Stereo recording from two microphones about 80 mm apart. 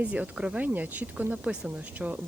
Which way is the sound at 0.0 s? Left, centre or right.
Centre.